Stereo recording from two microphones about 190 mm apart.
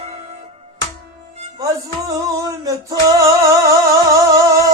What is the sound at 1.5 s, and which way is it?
Music, 15° right (ahead or behind).